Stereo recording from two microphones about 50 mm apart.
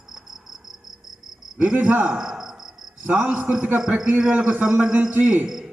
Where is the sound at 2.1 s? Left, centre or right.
Centre.